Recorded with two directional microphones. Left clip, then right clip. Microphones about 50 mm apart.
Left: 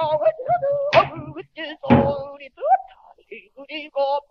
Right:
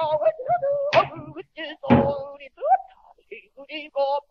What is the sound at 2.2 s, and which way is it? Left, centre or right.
Thunk, centre.